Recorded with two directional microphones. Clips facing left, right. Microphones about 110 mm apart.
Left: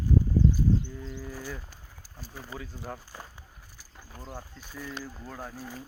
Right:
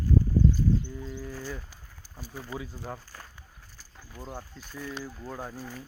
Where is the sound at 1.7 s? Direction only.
5° right (ahead or behind).